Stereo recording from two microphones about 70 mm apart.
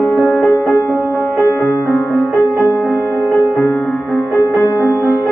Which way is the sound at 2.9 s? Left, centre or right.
Left.